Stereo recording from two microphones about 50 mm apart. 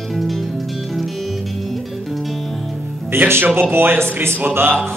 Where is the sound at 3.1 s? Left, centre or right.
Right.